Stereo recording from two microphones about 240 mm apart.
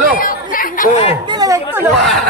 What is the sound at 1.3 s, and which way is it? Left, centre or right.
Speech, centre.